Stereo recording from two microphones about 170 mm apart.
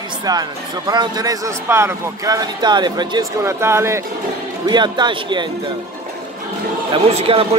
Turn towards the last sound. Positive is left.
turn(degrees=-35)  # may be behind; listen again after turning